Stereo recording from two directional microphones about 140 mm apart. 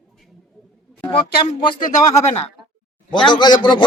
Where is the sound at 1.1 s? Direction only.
40° left (ahead or behind).